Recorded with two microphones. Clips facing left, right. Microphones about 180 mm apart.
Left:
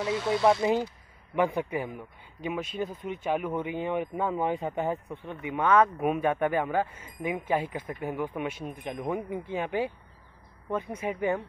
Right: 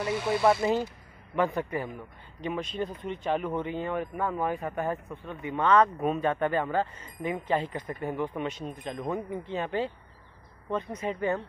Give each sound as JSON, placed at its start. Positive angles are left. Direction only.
{"t": 0.0, "sound": "speech", "side_deg": -10}
{"t": 0.6, "sound": "speech", "side_deg": 15}